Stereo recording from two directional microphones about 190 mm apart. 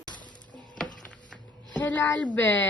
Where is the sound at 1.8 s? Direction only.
10° left (ahead or behind).